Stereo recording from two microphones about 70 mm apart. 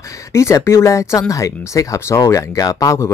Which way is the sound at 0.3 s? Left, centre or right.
Left.